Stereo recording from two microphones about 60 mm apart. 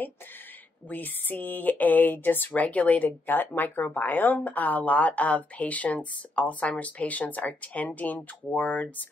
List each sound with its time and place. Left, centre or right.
0.8 s speech: left